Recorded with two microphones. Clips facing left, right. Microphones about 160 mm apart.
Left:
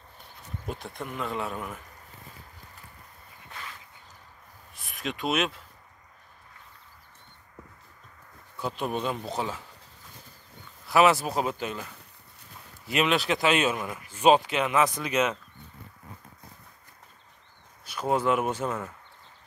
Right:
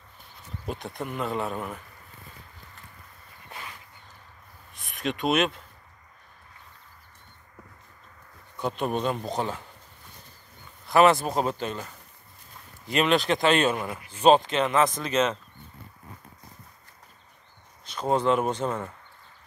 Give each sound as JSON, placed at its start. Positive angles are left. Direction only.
{"t": 0.7, "sound": "speech", "side_deg": 0}
{"t": 4.7, "sound": "speech", "side_deg": 5}
{"t": 8.5, "sound": "speech", "side_deg": 5}
{"t": 10.9, "sound": "speech", "side_deg": 5}
{"t": 17.8, "sound": "speech", "side_deg": 10}